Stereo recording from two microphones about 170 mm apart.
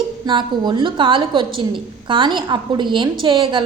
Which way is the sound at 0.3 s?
25° right (ahead or behind).